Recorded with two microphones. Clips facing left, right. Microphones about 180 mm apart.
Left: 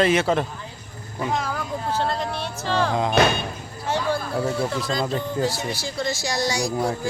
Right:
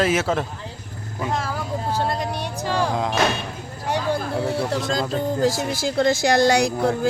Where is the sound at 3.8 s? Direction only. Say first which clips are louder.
Right 1 dB; 15° right (ahead or behind).